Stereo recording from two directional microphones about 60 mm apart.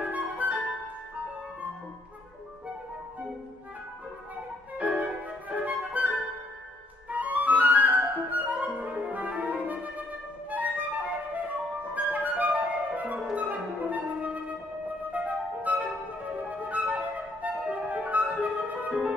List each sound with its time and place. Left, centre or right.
0.0 s music: right
4.7 s music: right
11.9 s flute: right
13.2 s clarinet: centre
15.0 s flute: right